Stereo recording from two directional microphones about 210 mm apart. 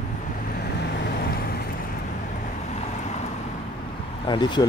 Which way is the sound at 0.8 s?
45° left (ahead or behind).